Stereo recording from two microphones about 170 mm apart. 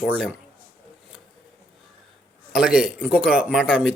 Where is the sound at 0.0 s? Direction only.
5° right (ahead or behind).